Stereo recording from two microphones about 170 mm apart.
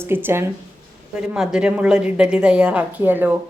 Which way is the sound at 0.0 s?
15° right (ahead or behind).